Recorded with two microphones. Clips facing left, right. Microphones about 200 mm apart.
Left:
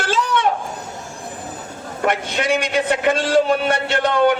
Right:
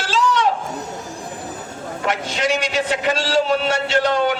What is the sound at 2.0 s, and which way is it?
A man's voice, 55° left (ahead or behind).